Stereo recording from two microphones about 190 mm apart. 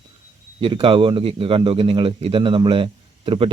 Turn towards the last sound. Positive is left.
turn(degrees=-30)  # may be behind; listen again after turning